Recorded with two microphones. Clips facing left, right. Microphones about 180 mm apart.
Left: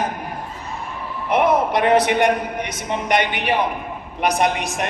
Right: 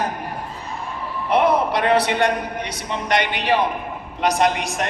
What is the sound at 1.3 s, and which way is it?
A man's voice, 20° left (ahead or behind).